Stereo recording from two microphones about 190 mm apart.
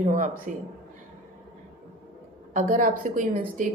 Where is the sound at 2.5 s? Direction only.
45° right (ahead or behind).